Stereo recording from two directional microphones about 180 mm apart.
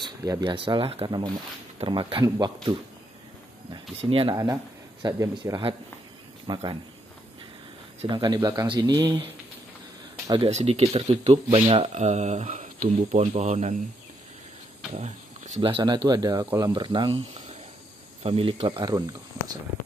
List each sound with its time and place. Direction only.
0.0 s speech: 20° right (ahead or behind)
4.0 s speech: 30° right (ahead or behind)
8.0 s speech: 25° right (ahead or behind)
10.5 s speech: 35° right (ahead or behind)
15.0 s a sound: 40° right (ahead or behind)
15.6 s speech: 25° right (ahead or behind)